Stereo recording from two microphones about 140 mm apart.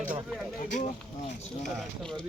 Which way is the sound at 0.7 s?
50° left (ahead or behind).